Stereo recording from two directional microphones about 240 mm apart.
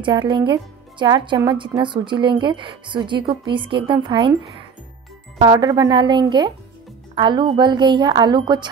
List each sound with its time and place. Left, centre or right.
0.0 s a woman's voice: centre